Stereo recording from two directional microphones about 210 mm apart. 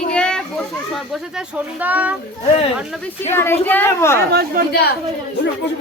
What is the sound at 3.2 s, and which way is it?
A woman's voice, 10° left (ahead or behind).